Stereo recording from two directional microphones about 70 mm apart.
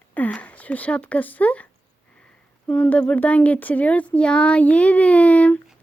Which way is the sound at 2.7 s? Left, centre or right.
Left.